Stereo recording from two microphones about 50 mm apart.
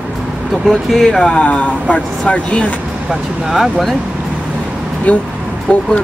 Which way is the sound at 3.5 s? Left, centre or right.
Centre.